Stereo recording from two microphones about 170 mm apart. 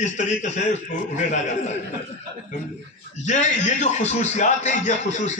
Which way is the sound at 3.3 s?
45° left (ahead or behind).